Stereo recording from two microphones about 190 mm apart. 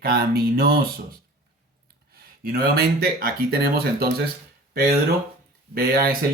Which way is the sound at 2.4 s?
50° right (ahead or behind).